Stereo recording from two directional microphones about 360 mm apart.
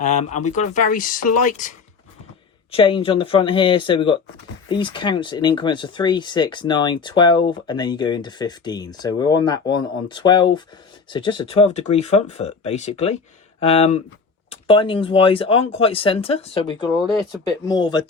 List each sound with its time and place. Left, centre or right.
0.0 s speech: centre
2.7 s speech: centre